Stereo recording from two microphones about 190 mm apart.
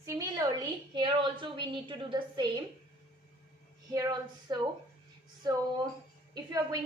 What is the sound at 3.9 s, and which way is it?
Speech, 20° right (ahead or behind).